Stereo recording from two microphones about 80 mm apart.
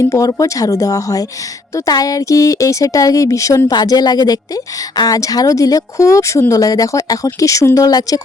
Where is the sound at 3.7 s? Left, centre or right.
Left.